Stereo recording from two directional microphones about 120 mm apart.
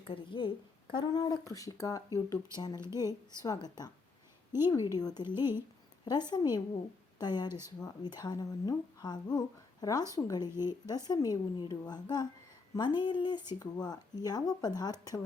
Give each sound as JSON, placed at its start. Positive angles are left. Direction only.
{"t": 0.1, "sound": "a woman's voice", "side_deg": 45}
{"t": 5.3, "sound": "speech", "side_deg": -20}
{"t": 6.1, "sound": "speech", "side_deg": 35}
{"t": 7.4, "sound": "speech", "side_deg": -20}
{"t": 7.8, "sound": "speech", "side_deg": 35}